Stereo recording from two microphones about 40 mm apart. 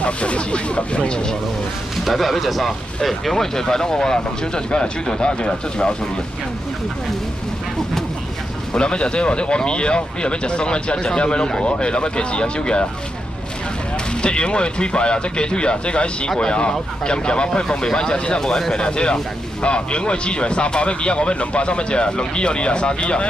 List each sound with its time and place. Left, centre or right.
0.0 s speech: left
2.0 s speech: centre; by 5.9 s left
8.7 s speech: left
14.2 s speech: left
18.4 s speech: centre